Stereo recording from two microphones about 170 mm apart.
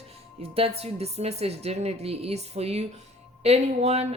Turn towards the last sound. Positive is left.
turn(degrees=-40)  # may be behind; listen again after turning